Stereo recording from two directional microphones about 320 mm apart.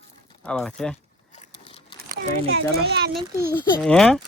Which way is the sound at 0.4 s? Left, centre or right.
Centre.